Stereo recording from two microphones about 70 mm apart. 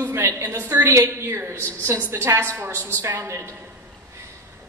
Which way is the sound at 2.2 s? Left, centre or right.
Right.